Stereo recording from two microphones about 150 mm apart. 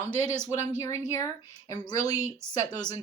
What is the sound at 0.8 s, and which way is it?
A woman's voice, 20° left (ahead or behind).